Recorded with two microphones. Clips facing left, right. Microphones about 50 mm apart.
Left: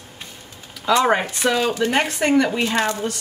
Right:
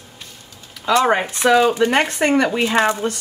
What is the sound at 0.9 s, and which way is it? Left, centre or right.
Speech, centre.